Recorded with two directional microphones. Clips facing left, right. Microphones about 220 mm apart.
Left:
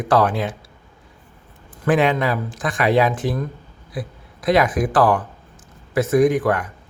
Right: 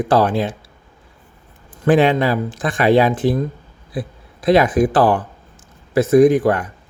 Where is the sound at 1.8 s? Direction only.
30° right (ahead or behind).